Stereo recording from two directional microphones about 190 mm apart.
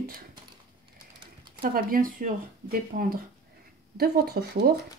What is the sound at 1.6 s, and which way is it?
Speech, 50° right (ahead or behind).